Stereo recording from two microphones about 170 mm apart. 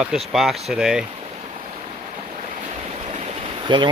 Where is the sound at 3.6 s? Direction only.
30° right (ahead or behind).